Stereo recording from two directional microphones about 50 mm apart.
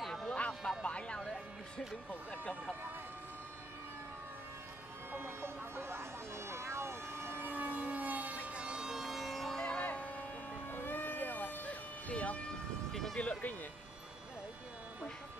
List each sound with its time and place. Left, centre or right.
0.3 s music: left
2.0 s speech: left
5.1 s ambulance: right
7.4 s vehicle: right
8.5 s siren: centre
9.6 s music: left
10.7 s vehicle: left
12.1 s siren: left
12.9 s a sound: centre
13.2 s speech: left